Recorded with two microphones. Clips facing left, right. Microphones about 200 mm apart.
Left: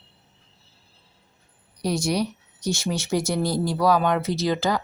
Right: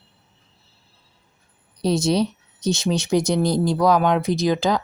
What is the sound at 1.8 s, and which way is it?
Speech, 25° right (ahead or behind).